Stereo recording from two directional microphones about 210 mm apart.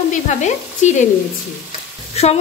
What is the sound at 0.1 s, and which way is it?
Speech, 35° left (ahead or behind).